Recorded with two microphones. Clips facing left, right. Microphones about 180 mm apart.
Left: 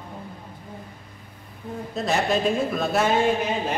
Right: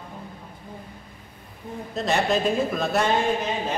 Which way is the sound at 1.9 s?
Centre (ahead or behind).